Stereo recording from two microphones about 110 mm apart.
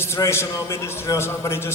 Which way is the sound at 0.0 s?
25° left (ahead or behind).